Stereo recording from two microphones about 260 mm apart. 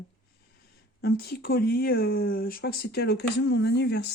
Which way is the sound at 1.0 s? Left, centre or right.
Left.